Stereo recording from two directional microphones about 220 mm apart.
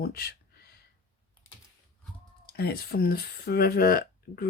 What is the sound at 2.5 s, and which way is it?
Speech, 45° left (ahead or behind).